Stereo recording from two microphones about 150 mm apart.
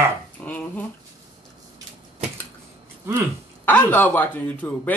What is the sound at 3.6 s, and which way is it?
Speech, 10° left (ahead or behind).